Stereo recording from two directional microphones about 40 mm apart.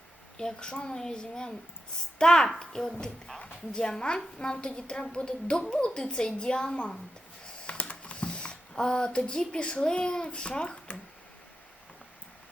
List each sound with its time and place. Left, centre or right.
0.3 s a child's voice: centre
7.4 s computer keyboard: left